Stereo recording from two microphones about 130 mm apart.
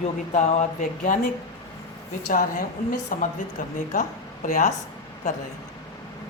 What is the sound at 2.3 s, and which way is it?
A woman's voice, 90° left.